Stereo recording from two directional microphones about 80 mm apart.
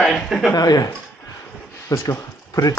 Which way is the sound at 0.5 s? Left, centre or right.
Left.